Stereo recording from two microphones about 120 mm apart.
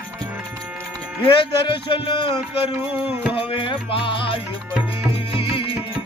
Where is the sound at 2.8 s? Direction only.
15° right (ahead or behind).